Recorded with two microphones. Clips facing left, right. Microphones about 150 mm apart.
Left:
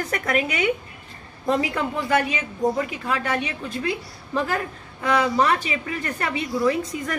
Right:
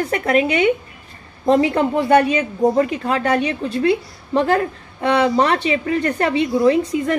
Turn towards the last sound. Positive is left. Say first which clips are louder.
# right 7 dB
turn(degrees=-30)  # may be behind; listen again after turning